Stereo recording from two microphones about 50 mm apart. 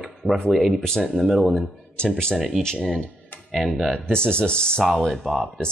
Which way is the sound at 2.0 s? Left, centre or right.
Centre.